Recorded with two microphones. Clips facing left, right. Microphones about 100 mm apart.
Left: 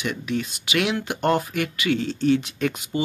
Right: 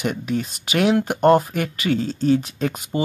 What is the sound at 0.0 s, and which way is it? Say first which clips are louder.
Speech: right 3 dB; 40° right (ahead or behind).